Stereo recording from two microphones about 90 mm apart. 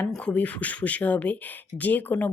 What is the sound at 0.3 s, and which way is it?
Speech, 15° left (ahead or behind).